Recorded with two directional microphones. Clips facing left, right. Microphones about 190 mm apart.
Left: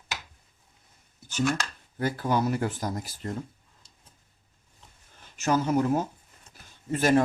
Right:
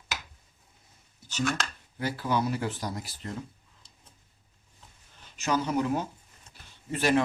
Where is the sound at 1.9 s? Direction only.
50° left (ahead or behind).